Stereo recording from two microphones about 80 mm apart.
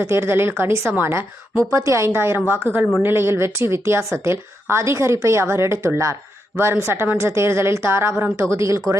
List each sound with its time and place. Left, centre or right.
0.0 s a woman's voice: right